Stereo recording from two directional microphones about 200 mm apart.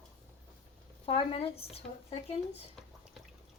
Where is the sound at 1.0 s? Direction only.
30° left (ahead or behind).